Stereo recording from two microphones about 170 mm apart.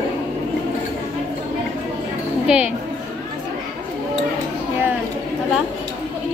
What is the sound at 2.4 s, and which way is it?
Speech, 5° right (ahead or behind).